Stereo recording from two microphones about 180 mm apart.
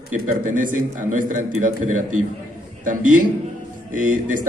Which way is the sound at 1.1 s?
45° right (ahead or behind).